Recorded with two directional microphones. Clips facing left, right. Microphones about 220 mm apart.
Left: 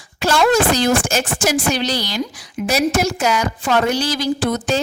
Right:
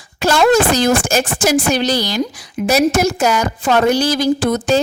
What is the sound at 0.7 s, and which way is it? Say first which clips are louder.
A woman's voice: right 2 dB; 40° right (ahead or behind).